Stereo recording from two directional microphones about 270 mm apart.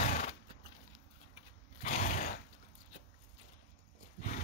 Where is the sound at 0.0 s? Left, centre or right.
Left.